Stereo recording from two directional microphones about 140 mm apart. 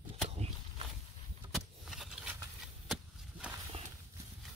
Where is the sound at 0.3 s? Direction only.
50° right (ahead or behind).